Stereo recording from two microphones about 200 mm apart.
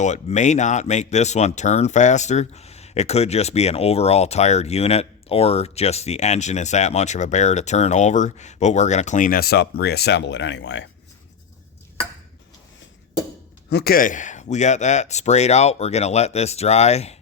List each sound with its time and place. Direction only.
0.0 s speech: 35° left (ahead or behind); by 10.8 s 65° left (ahead or behind)
13.7 s speech: 50° left (ahead or behind); by 17.2 s 35° left (ahead or behind)